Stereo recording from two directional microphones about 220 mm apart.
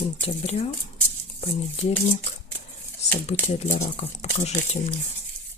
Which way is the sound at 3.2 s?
30° left (ahead or behind).